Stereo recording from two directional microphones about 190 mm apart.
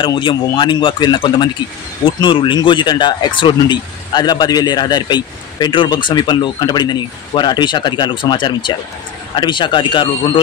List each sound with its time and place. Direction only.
0.0 s speech: 25° left (ahead or behind)